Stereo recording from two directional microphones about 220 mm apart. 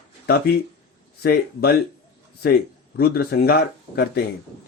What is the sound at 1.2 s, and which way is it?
Speech, 45° left (ahead or behind).